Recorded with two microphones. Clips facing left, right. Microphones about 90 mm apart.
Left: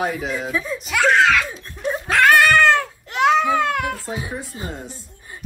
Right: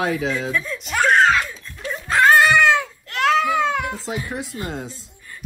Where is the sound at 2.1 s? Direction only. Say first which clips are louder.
Even; 30° right (ahead or behind).